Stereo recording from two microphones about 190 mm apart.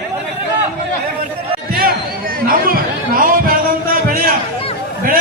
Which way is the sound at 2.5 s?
50° right (ahead or behind).